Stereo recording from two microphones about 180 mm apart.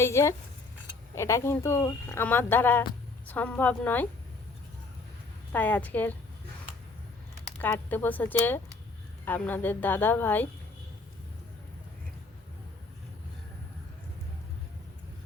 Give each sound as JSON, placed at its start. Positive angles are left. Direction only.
{"t": 0.0, "sound": "dishes", "side_deg": 15}
{"t": 1.1, "sound": "speech", "side_deg": 15}
{"t": 5.5, "sound": "speech", "side_deg": 10}
{"t": 7.6, "sound": "speech", "side_deg": 10}